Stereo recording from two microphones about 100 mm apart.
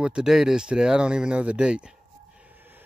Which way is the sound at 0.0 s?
5° right (ahead or behind).